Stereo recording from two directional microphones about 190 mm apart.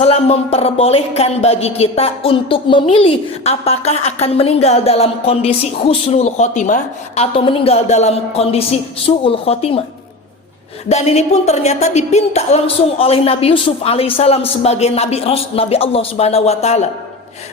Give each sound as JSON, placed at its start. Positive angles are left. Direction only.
{"t": 0.0, "sound": "speech", "side_deg": 35}
{"t": 10.8, "sound": "speech", "side_deg": 35}